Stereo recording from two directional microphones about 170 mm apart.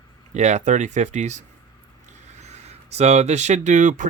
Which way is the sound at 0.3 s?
45° right (ahead or behind).